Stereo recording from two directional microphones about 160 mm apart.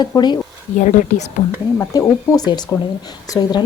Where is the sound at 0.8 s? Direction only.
45° left (ahead or behind).